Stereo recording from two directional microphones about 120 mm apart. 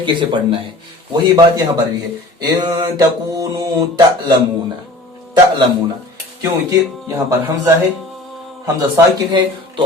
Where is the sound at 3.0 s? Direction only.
30° right (ahead or behind).